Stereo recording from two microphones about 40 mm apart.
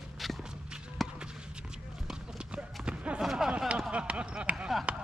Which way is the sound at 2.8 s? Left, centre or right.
Right.